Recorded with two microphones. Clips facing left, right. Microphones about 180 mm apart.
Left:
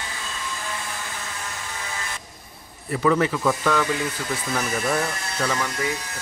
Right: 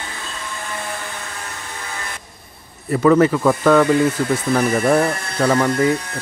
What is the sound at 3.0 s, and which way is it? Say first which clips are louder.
Speech: right 7 dB; 50° right (ahead or behind).